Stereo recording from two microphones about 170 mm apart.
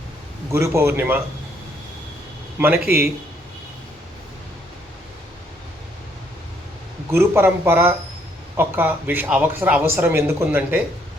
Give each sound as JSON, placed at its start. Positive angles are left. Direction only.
{"t": 0.5, "sound": "a man's voice", "side_deg": -15}
{"t": 2.6, "sound": "a man's voice", "side_deg": -10}
{"t": 7.1, "sound": "a man's voice", "side_deg": -15}